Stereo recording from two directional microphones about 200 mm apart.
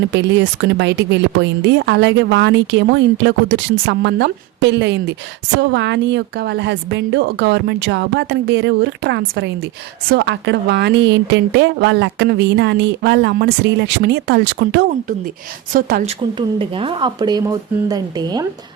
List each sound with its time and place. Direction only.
0.1 s a woman's voice: 65° right (ahead or behind)
15.7 s a woman's voice: 45° right (ahead or behind)
16.6 s speech: 25° right (ahead or behind)